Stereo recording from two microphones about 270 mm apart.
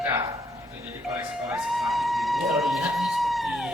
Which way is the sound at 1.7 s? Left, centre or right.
Centre.